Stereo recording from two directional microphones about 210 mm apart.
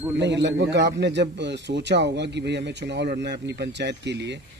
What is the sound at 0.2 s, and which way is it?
A man's voice, 55° right (ahead or behind).